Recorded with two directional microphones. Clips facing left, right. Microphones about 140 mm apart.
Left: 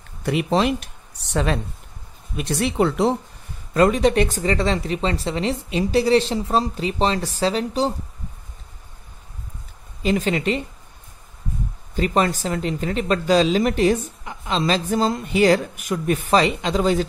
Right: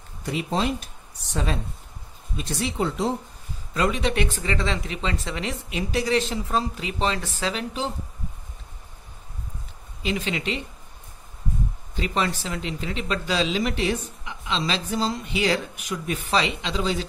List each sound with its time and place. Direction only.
0.2 s speech: 65° left (ahead or behind)
3.7 s speech: 45° left (ahead or behind)
10.0 s speech: 45° left (ahead or behind)
11.9 s speech: 45° left (ahead or behind)